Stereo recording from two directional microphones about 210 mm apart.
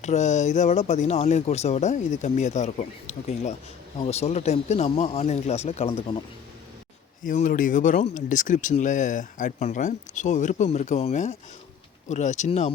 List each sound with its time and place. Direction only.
0.0 s speech: 35° left (ahead or behind)
7.3 s speech: 40° left (ahead or behind)